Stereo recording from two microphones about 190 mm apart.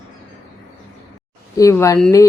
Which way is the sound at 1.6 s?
15° left (ahead or behind).